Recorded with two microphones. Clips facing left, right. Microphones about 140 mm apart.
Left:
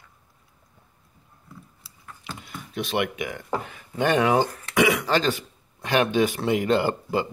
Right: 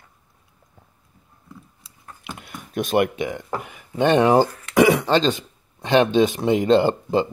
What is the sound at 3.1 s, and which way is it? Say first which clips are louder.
Speech: right 5 dB; 25° right (ahead or behind).